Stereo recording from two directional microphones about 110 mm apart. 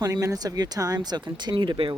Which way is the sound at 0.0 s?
30° right (ahead or behind).